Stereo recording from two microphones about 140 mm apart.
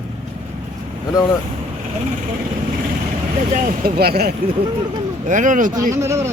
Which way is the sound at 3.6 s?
90° right.